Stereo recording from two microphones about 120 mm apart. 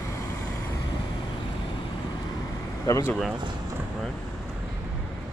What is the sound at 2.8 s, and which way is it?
Speech, 25° left (ahead or behind).